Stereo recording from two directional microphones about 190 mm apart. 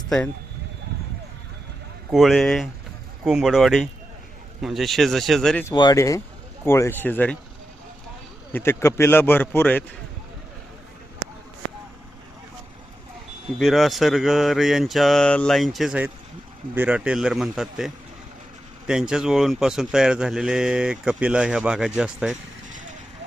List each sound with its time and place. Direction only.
2.0 s speech: centre (ahead or behind)
5.7 s speech: 20° left (ahead or behind)
8.5 s speech: 10° left (ahead or behind)
13.6 s speech: centre (ahead or behind)